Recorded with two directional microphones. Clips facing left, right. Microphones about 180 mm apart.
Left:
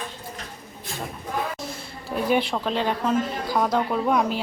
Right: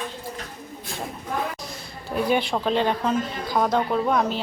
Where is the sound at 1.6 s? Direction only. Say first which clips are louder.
Left 1 dB; centre (ahead or behind).